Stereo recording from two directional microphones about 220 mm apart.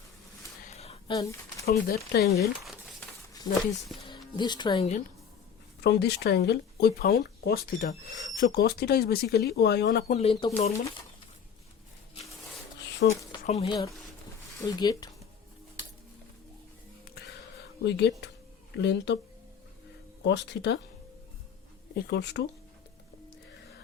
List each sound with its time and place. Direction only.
0.6 s a sound: 30° left (ahead or behind)
1.1 s speech: 15° left (ahead or behind)
1.6 s speech: 45° left (ahead or behind)
4.4 s speech: 20° left (ahead or behind)
5.8 s speech: 50° left (ahead or behind)
10.1 s speech: 30° left (ahead or behind)
13.0 s speech: 50° left (ahead or behind)
13.4 s speech: 30° left (ahead or behind)
14.6 s speech: 15° left (ahead or behind)
17.8 s speech: 50° left (ahead or behind)
20.2 s speech: 50° left (ahead or behind)
21.9 s speech: 50° left (ahead or behind)